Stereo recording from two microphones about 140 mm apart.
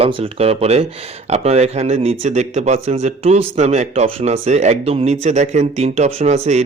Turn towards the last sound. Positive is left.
turn(degrees=-50)  # may be behind; listen again after turning